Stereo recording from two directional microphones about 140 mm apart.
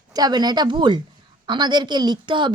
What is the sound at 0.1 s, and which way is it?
A woman's voice, 30° right (ahead or behind).